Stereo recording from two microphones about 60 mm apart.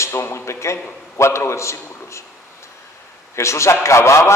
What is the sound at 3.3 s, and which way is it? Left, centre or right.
Speech, left.